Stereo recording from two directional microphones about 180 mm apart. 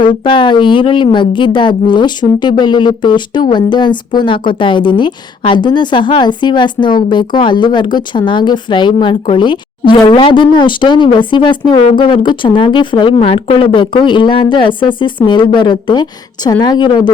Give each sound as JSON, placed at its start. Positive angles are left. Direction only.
{"t": 0.0, "sound": "a woman's voice", "side_deg": 25}